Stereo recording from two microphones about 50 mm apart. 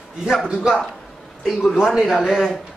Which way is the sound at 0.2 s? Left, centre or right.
Centre.